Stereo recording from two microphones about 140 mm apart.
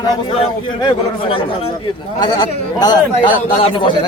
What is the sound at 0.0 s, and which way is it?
A man's voice, 35° left (ahead or behind).